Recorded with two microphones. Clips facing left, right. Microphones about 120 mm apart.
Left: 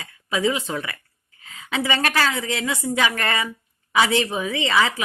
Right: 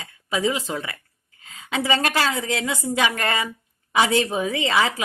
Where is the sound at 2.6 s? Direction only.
Centre (ahead or behind).